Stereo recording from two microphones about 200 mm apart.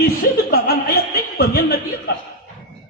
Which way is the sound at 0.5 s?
50° left (ahead or behind).